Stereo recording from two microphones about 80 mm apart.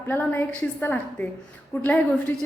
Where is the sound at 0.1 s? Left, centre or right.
Left.